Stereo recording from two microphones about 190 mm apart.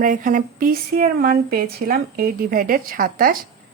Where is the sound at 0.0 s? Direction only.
45° right (ahead or behind).